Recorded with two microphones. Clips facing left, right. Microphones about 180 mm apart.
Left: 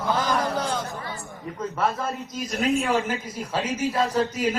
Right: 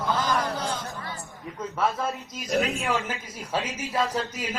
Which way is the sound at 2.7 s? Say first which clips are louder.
Left 5 dB; 40° left (ahead or behind).